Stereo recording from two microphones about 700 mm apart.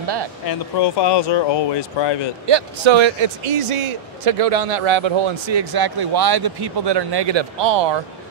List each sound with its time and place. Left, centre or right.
0.0 s a sound: right
0.5 s speech: left
2.4 s speech: right